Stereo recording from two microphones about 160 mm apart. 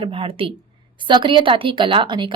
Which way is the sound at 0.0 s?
30° right (ahead or behind).